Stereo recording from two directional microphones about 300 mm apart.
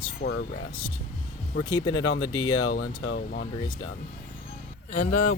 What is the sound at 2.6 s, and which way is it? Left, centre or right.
Speech, left.